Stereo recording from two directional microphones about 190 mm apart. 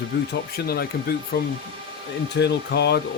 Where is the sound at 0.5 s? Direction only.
55° left (ahead or behind).